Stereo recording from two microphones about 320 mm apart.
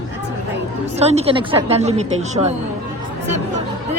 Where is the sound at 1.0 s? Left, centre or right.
Centre.